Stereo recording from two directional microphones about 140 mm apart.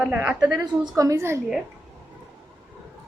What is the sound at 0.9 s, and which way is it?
Speech, 20° right (ahead or behind).